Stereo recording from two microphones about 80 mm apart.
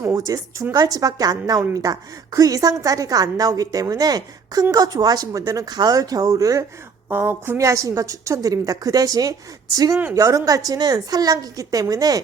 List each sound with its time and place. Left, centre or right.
0.0 s a woman's voice: right
7.1 s speech: right
7.7 s a woman's voice: right